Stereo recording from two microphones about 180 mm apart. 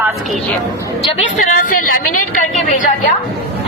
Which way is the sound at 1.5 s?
45° left (ahead or behind).